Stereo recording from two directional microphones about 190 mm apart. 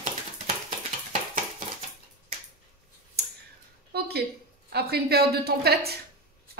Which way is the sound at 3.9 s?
55° right (ahead or behind).